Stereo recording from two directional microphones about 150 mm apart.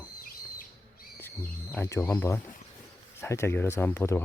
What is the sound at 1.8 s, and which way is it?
Speech, 20° left (ahead or behind).